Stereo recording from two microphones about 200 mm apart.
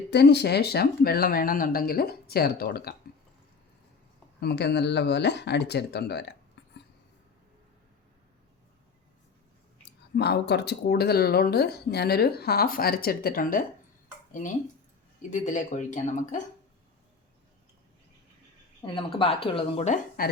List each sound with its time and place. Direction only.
0.1 s speech: 55° left (ahead or behind)
4.4 s speech: 55° left (ahead or behind)
6.6 s a sound: 60° left (ahead or behind)
9.8 s speech: 55° left (ahead or behind)
15.3 s speech: 40° left (ahead or behind)
18.8 s speech: 25° left (ahead or behind)
20.2 s a woman's voice: 50° left (ahead or behind)